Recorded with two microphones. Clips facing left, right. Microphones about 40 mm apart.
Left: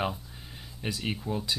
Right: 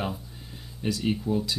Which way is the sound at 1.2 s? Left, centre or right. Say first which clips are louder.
Right 6 dB; centre.